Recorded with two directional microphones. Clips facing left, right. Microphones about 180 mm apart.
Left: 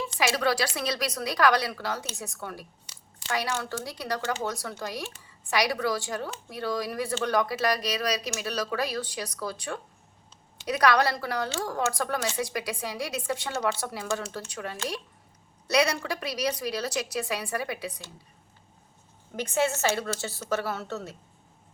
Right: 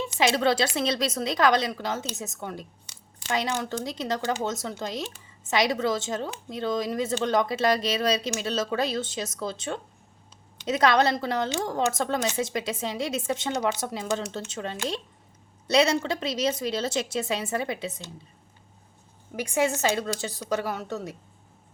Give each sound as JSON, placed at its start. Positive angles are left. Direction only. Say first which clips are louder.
{"t": 0.2, "sound": "a woman's voice", "louder": "right 3 dB", "side_deg": -25}
{"t": 19.4, "sound": "a woman's voice", "louder": "right 1 dB", "side_deg": -15}